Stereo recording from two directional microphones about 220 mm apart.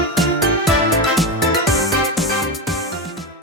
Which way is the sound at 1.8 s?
Centre (ahead or behind).